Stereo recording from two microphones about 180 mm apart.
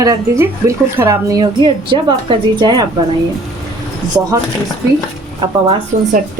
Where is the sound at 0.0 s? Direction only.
20° right (ahead or behind).